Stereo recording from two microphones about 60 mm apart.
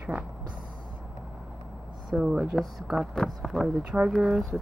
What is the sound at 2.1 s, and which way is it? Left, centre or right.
Speech, centre.